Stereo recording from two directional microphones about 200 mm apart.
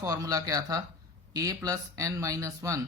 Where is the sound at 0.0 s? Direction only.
15° right (ahead or behind).